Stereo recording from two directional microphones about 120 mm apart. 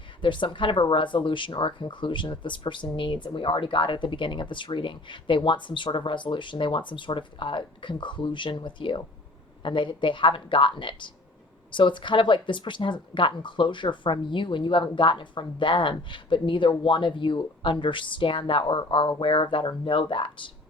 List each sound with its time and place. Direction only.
0.2 s speech: 45° left (ahead or behind)